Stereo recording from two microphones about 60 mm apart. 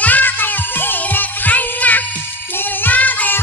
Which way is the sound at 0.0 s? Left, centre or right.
Left.